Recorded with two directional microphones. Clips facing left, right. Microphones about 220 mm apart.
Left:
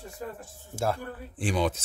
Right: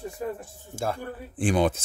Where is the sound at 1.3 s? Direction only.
50° right (ahead or behind).